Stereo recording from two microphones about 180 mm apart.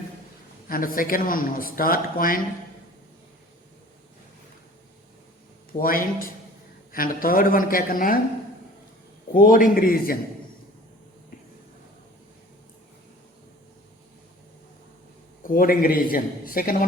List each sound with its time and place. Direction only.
0.7 s speech: 50° left (ahead or behind)
5.7 s speech: 50° left (ahead or behind)
9.3 s speech: 50° left (ahead or behind)
15.4 s speech: 55° left (ahead or behind)